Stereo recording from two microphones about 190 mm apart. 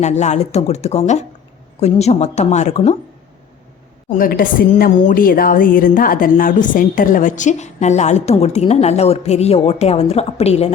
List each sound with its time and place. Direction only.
0.0 s a woman's voice: 35° left (ahead or behind)
4.1 s a woman's voice: 50° left (ahead or behind)